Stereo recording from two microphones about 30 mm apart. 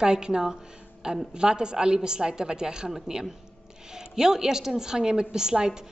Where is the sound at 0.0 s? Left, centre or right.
Right.